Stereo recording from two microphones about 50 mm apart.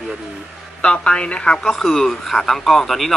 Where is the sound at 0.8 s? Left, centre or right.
Left.